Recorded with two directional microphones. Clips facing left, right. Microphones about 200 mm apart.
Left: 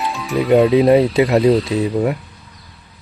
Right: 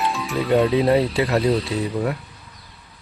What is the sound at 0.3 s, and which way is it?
Speech, 15° left (ahead or behind).